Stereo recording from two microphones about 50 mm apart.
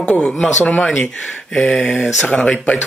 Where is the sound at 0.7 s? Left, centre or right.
Centre.